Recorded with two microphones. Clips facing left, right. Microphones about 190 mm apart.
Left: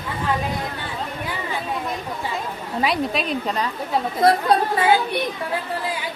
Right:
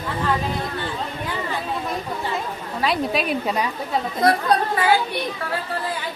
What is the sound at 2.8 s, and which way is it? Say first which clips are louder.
Speech: right 2 dB; centre (ahead or behind).